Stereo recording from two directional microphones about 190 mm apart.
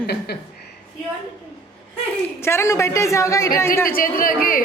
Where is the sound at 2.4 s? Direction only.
15° left (ahead or behind).